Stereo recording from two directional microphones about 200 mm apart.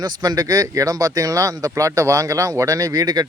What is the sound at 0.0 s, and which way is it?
Speech, 20° right (ahead or behind).